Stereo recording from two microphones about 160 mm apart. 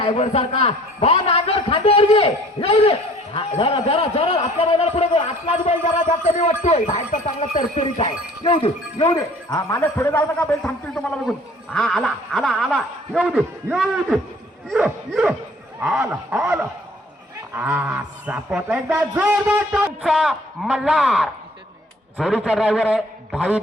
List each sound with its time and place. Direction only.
0.1 s a man's voice: 40° left (ahead or behind)
8.4 s a man's voice: 35° left (ahead or behind); by 10.5 s 15° left (ahead or behind)
10.6 s a man's voice: 5° left (ahead or behind)
17.7 s a man's voice: 10° right (ahead or behind)